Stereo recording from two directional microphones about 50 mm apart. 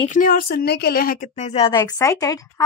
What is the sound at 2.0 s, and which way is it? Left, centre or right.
Speech, left.